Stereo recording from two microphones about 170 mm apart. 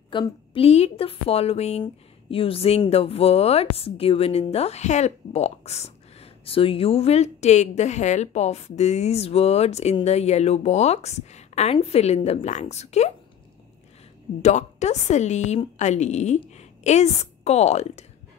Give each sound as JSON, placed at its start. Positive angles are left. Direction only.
{"t": 0.1, "sound": "speech", "side_deg": 30}
{"t": 14.4, "sound": "speech", "side_deg": 40}